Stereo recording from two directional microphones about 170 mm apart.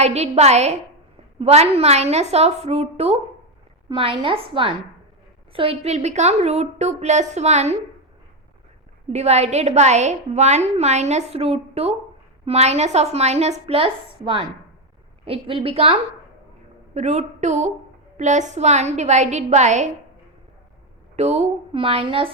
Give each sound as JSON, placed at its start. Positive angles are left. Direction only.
{"t": 0.0, "sound": "a woman's voice", "side_deg": -40}
{"t": 9.0, "sound": "a woman's voice", "side_deg": -40}
{"t": 21.2, "sound": "a woman's voice", "side_deg": -40}